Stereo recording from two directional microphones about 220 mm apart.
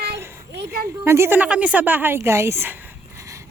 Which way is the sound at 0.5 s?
45° right (ahead or behind).